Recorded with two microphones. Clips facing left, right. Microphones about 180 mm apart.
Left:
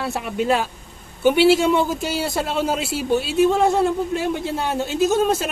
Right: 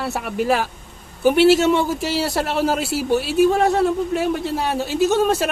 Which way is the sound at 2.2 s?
70° right (ahead or behind).